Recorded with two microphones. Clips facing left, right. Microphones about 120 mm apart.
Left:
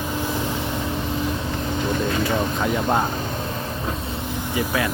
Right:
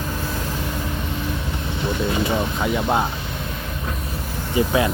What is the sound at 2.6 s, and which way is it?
Speech, centre (ahead or behind).